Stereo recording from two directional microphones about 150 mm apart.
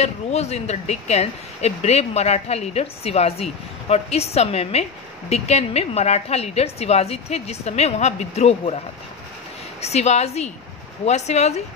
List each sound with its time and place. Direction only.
0.0 s speech: 45° left (ahead or behind)
9.8 s speech: 45° left (ahead or behind)